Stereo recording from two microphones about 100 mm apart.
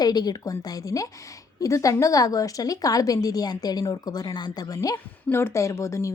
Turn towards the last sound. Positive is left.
turn(degrees=30)  # may be behind; listen again after turning